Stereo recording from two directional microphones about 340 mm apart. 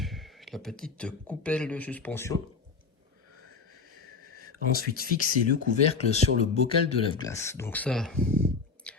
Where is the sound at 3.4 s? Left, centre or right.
Left.